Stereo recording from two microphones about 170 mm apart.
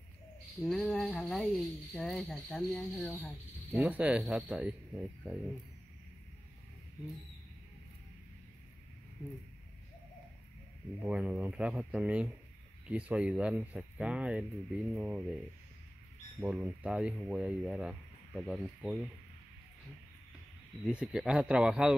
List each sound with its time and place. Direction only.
0.6 s speech: centre (ahead or behind)
11.0 s speech: 5° right (ahead or behind)
16.3 s speech: 10° right (ahead or behind)
20.8 s speech: 5° right (ahead or behind)